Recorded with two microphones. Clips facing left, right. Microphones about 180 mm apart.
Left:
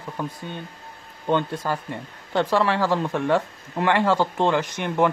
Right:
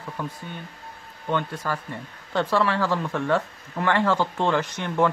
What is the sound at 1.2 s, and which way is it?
Speech, 25° left (ahead or behind).